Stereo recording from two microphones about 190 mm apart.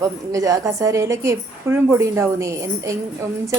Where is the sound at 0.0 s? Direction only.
15° right (ahead or behind).